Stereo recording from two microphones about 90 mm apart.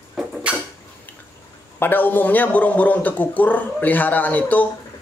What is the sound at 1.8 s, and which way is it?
A man's voice, 20° left (ahead or behind).